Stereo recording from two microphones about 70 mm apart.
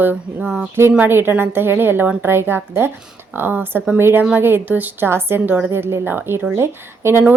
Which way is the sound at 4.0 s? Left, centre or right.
Right.